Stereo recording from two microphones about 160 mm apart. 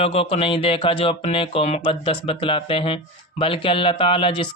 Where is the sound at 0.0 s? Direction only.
35° left (ahead or behind).